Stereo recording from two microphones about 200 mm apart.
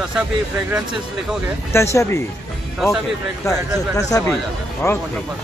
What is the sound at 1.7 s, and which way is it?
Speech, 15° left (ahead or behind).